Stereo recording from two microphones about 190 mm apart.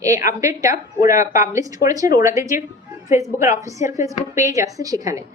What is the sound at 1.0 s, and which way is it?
Speech, 45° left (ahead or behind).